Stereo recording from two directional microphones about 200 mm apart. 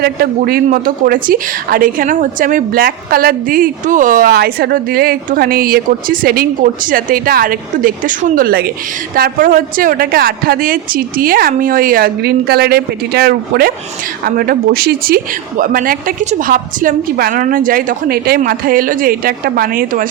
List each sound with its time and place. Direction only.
0.0 s a woman's voice: 50° right (ahead or behind)